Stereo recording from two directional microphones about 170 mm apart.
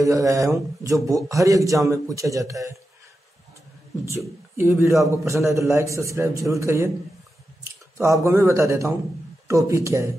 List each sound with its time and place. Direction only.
0.0 s a man's voice: 20° right (ahead or behind)
4.6 s a man's voice: 15° right (ahead or behind)
8.0 s a man's voice: 15° right (ahead or behind)